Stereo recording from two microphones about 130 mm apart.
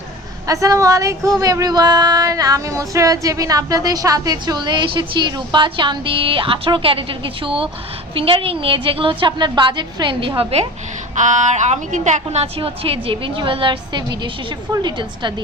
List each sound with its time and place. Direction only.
0.4 s a woman's voice: 25° right (ahead or behind)
1.4 s female singing: 25° right (ahead or behind); by 7.7 s 40° right (ahead or behind)
8.1 s a woman's voice: 45° right (ahead or behind)
11.1 s a woman's voice: 75° right (ahead or behind); by 14.3 s 35° right (ahead or behind)
14.7 s female singing: 35° right (ahead or behind)